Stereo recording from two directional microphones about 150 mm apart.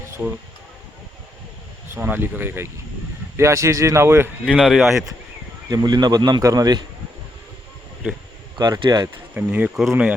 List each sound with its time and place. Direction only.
0.1 s a sound: 10° right (ahead or behind)
1.9 s a man's voice: 15° right (ahead or behind)
4.5 s speech: centre (ahead or behind)
5.6 s a man's voice: 25° right (ahead or behind)
8.5 s a man's voice: 25° right (ahead or behind)
9.3 s speech: 10° right (ahead or behind)